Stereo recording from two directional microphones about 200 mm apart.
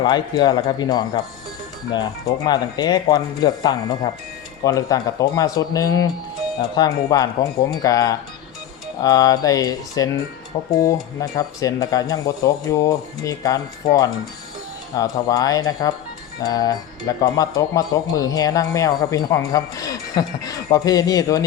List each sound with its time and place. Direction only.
0.0 s speech: 20° left (ahead or behind)